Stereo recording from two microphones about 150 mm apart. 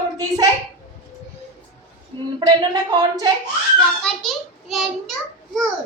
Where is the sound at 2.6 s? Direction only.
25° right (ahead or behind).